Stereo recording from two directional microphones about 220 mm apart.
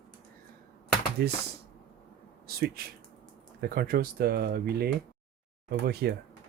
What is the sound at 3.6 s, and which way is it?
Speech, 45° right (ahead or behind).